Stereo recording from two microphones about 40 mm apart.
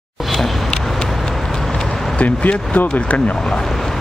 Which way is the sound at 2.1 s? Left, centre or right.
Left.